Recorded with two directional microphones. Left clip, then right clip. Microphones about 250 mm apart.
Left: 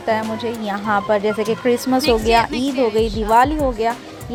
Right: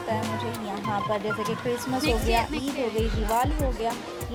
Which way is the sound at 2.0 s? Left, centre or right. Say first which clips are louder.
Left 9 dB; centre.